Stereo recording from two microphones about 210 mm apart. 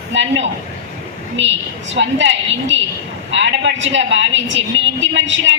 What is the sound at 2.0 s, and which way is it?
Speech, 60° right (ahead or behind).